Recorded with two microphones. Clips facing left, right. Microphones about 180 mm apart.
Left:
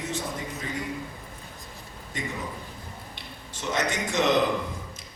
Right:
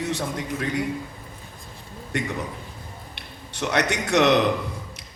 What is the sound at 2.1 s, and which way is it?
A man's voice, 70° right (ahead or behind).